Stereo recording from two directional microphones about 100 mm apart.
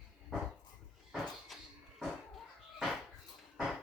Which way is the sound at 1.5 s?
Centre (ahead or behind).